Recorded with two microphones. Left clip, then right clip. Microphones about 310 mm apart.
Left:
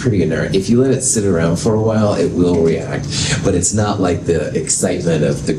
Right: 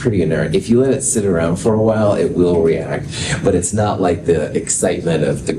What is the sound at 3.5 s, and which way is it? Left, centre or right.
Speech, right.